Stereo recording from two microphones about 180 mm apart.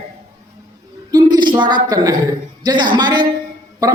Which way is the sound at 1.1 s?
20° right (ahead or behind).